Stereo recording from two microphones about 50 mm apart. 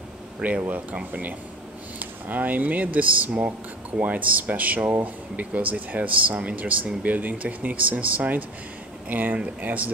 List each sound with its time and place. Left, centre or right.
0.4 s speech: right